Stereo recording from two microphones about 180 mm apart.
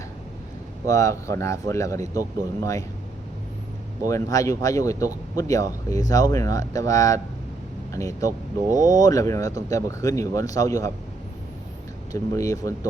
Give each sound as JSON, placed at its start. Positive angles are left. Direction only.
{"t": 0.9, "sound": "speech", "side_deg": 15}
{"t": 4.0, "sound": "speech", "side_deg": 20}
{"t": 12.1, "sound": "speech", "side_deg": 20}